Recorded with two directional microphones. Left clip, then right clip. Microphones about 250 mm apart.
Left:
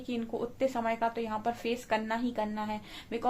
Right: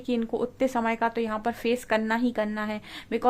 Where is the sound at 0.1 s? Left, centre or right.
Right.